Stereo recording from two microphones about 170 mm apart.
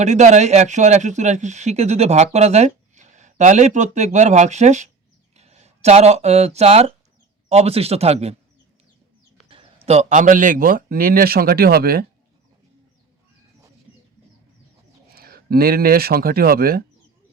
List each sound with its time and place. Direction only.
0.0 s a man's voice: 45° right (ahead or behind)
9.5 s speech: 35° right (ahead or behind); by 12.0 s 65° right (ahead or behind)
15.1 s speech: 65° right (ahead or behind)